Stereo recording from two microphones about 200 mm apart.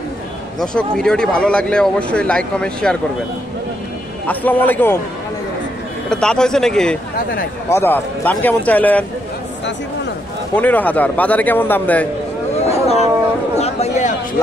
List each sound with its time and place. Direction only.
0.6 s speech: 5° left (ahead or behind)
4.3 s a man's voice: 10° left (ahead or behind)
6.0 s speech: 5° left (ahead or behind)
7.2 s speech: 50° left (ahead or behind)
7.7 s a man's voice: 10° left (ahead or behind)
10.5 s a man's voice: 10° left (ahead or behind)
12.6 s a sound: 30° left (ahead or behind)